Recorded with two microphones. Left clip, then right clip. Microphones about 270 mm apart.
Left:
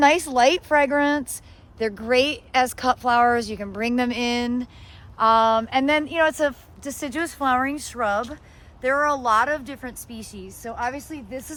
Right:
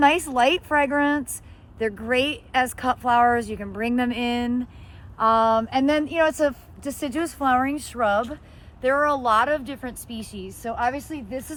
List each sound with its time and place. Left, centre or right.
0.0 s speech: left; by 11.5 s centre